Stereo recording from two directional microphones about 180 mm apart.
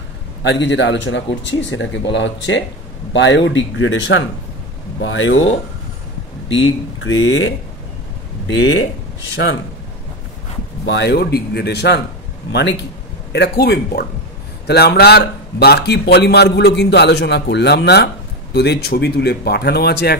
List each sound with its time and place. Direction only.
0.4 s a man's voice: 90° left
7.0 s a man's voice: 90° left
9.3 s speech: 85° left
10.9 s a man's voice: 70° left (ahead or behind)